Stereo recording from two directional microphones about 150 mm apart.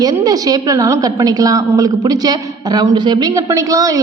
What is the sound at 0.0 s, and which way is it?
A woman's voice, 25° right (ahead or behind).